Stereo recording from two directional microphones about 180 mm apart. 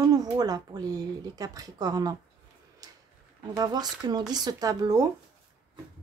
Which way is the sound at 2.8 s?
20° right (ahead or behind).